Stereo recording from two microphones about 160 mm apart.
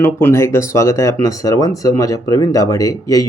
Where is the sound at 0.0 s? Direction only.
15° left (ahead or behind).